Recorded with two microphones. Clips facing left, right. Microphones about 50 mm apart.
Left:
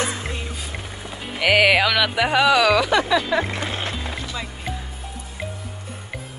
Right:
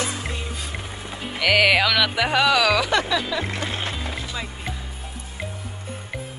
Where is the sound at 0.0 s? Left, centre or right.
Left.